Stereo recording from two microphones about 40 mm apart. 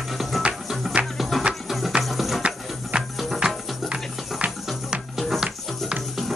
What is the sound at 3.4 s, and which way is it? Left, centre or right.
Music, right.